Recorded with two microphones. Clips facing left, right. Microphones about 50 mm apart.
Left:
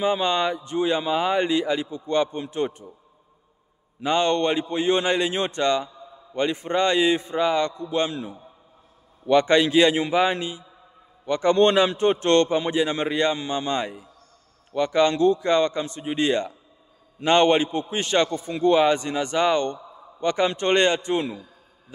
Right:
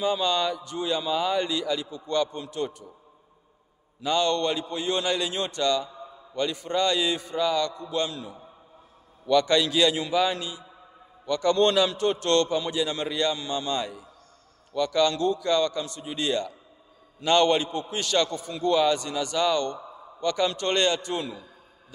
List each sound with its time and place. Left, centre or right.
0.0 s a man's voice: left
4.0 s a man's voice: left